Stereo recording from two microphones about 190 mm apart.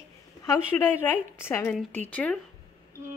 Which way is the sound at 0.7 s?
10° left (ahead or behind).